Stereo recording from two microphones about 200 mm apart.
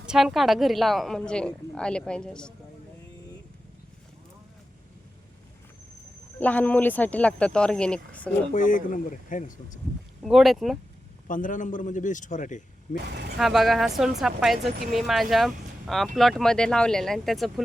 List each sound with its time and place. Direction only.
0.1 s a woman's voice: centre (ahead or behind)
6.4 s speech: 10° left (ahead or behind)
8.5 s speech: 40° left (ahead or behind)
10.2 s a woman's voice: centre (ahead or behind)
11.3 s speech: 40° left (ahead or behind)
13.1 s speech: 55° right (ahead or behind)
13.4 s a woman's voice: centre (ahead or behind)